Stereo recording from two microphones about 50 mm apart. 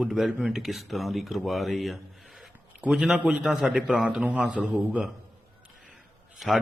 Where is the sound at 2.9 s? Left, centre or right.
Right.